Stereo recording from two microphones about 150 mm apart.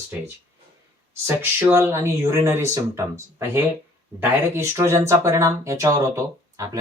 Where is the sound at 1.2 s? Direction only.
15° right (ahead or behind).